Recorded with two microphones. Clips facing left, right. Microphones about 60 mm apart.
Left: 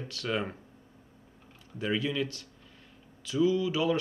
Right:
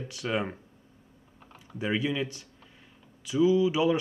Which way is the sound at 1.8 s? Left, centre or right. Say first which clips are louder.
Right 1 dB; centre.